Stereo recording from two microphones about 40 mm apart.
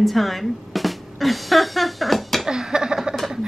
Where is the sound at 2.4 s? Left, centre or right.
Centre.